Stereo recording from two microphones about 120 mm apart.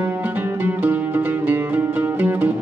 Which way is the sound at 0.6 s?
15° right (ahead or behind).